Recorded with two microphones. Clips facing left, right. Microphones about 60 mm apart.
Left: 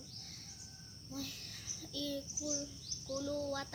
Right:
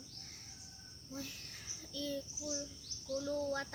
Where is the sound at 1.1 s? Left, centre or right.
Right.